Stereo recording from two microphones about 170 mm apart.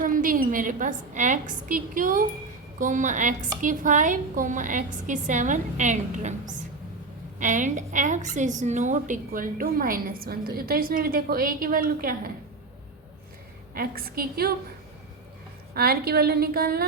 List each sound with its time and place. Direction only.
0.0 s a woman's voice: 55° right (ahead or behind)
7.3 s a woman's voice: 50° right (ahead or behind)
13.7 s a woman's voice: 60° right (ahead or behind)
15.7 s a woman's voice: 65° right (ahead or behind)